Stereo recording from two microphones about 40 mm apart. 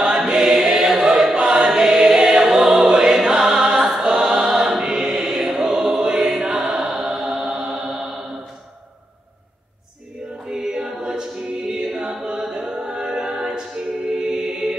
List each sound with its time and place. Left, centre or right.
0.2 s choir: centre
6.1 s choir: centre
6.7 s music: centre
10.4 s music: centre
11.1 s choir: centre
12.3 s music: centre